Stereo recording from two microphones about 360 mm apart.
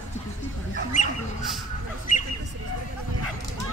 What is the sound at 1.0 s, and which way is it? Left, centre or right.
Bird, centre.